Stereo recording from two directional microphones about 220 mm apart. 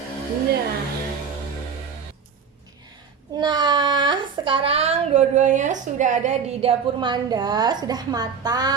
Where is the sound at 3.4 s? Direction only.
20° right (ahead or behind).